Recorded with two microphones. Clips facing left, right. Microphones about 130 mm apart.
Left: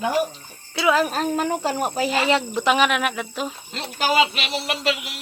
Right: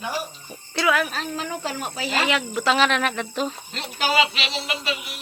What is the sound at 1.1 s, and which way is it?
Speech, 45° left (ahead or behind).